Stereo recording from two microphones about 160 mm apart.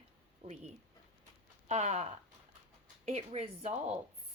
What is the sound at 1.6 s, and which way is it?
Speech, 45° right (ahead or behind).